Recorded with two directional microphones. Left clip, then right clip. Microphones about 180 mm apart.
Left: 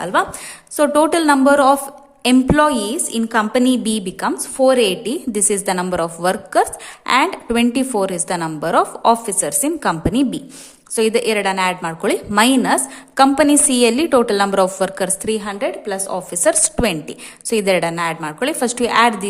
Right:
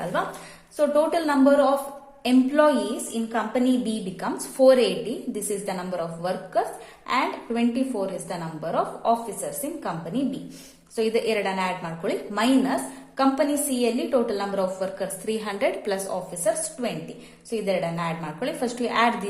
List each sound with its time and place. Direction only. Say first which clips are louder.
0.0 s a woman's voice: left 9 dB; 40° left (ahead or behind)
4.5 s a woman's voice: left 3 dB; 30° left (ahead or behind); by 10.2 s 45° left (ahead or behind)
10.9 s a woman's voice: left 7 dB; 35° left (ahead or behind)
15.3 s a woman's voice: left 1 dB; 25° left (ahead or behind)
16.1 s a woman's voice: left 12 dB; 45° left (ahead or behind)